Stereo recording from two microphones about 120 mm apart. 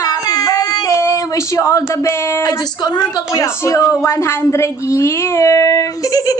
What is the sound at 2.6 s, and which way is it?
A woman's voice, 35° left (ahead or behind).